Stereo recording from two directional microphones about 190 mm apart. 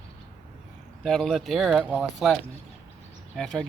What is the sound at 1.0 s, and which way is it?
Speech, centre (ahead or behind).